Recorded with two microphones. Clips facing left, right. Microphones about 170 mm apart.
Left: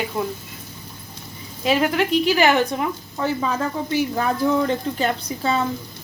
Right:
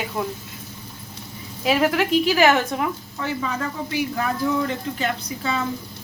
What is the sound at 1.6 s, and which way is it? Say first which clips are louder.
A woman's voice: even; 5° right (ahead or behind).